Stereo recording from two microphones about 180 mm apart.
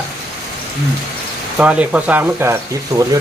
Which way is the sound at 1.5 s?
5° right (ahead or behind).